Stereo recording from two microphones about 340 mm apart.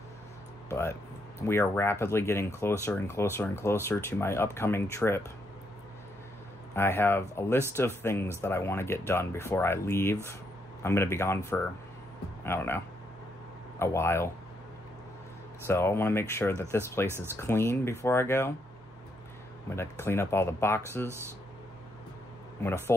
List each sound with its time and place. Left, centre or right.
0.7 s speech: centre
6.7 s speech: centre
13.7 s speech: centre
15.6 s speech: centre
19.7 s speech: centre
21.1 s speech: centre
22.6 s speech: centre